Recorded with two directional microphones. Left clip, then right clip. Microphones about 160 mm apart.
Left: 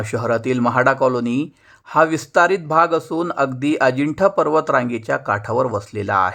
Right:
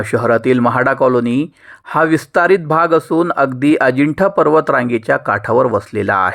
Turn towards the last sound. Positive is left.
turn(degrees=-25)  # may be behind; listen again after turning